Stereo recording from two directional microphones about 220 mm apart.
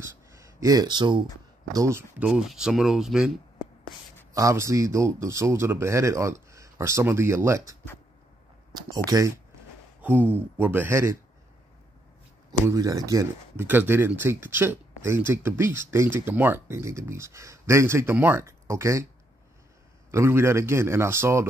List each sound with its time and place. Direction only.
0.0 s a sound: 15° right (ahead or behind)
1.7 s speech: 15° right (ahead or behind)
4.3 s speech: 15° right (ahead or behind)
8.7 s speech: 15° right (ahead or behind)
12.4 s speech: 15° right (ahead or behind)
20.1 s speech: 10° right (ahead or behind)